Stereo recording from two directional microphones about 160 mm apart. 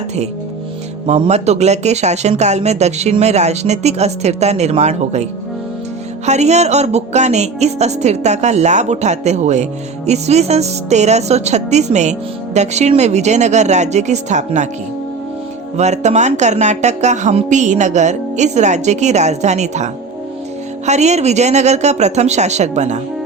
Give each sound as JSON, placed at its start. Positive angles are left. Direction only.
{"t": 1.0, "sound": "speech", "side_deg": -45}
{"t": 15.8, "sound": "speech", "side_deg": -45}